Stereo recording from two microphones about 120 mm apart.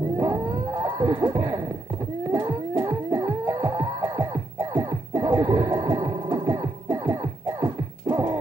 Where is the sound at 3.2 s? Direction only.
20° right (ahead or behind).